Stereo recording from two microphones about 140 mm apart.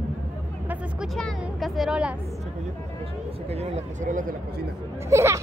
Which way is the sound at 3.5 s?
50° right (ahead or behind).